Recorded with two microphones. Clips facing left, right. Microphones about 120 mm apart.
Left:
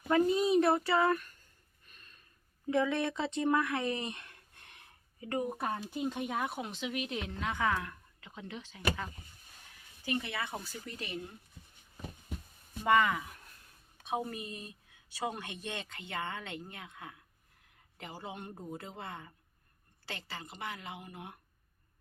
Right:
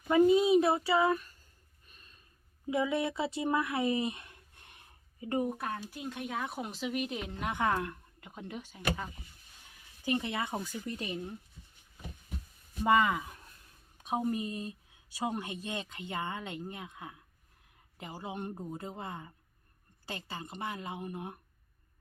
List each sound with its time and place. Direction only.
0.3 s speech: 5° right (ahead or behind)
2.6 s speech: 10° right (ahead or behind)
5.5 s speech: 15° left (ahead or behind)
6.5 s speech: 5° right (ahead or behind)
7.3 s speech: 15° right (ahead or behind)
10.1 s speech: 20° right (ahead or behind)
12.8 s speech: 15° right (ahead or behind)
14.3 s speech: 35° right (ahead or behind)
15.2 s speech: 15° right (ahead or behind)